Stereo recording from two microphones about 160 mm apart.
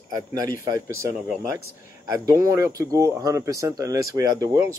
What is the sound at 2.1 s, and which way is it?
Speech, 20° right (ahead or behind).